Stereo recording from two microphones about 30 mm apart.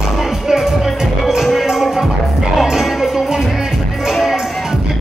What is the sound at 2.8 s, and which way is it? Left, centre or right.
Music, centre.